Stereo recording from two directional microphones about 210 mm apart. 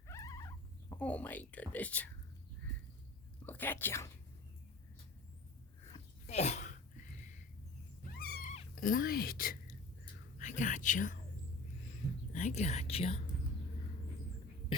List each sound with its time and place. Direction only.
0.1 s cat: 15° left (ahead or behind)
3.4 s speech: 10° left (ahead or behind)
6.2 s sneeze: 30° left (ahead or behind)
8.1 s cat: 50° left (ahead or behind)
8.7 s speech: 40° left (ahead or behind)
10.3 s whispering: 35° left (ahead or behind)
12.3 s speech: 35° left (ahead or behind)